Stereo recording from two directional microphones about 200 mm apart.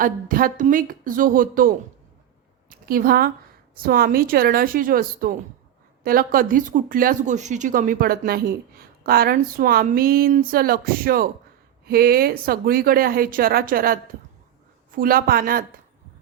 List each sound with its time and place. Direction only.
0.0 s a woman's voice: 45° right (ahead or behind)